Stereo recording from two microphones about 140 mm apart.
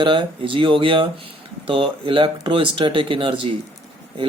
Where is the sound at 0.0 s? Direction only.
35° right (ahead or behind).